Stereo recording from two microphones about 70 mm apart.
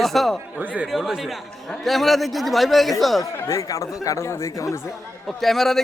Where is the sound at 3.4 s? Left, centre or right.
Left.